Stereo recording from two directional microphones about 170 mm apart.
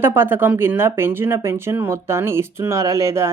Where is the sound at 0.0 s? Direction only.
15° right (ahead or behind).